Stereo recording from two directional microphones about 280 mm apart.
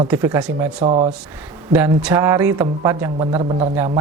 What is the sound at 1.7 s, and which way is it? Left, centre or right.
Speech, centre.